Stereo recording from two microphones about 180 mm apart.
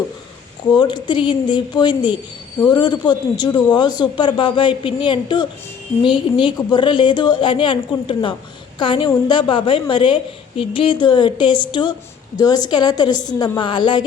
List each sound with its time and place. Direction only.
0.7 s speech: 25° left (ahead or behind)